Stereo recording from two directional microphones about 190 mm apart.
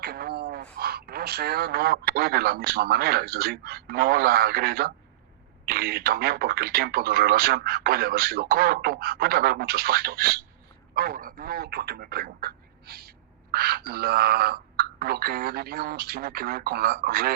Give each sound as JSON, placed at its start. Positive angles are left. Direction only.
{"t": 0.0, "sound": "speech", "side_deg": -55}